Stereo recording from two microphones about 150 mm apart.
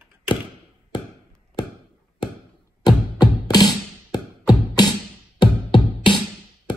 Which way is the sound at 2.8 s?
30° left (ahead or behind).